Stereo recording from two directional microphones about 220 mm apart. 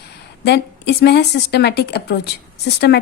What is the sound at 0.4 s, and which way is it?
Speech, 50° left (ahead or behind).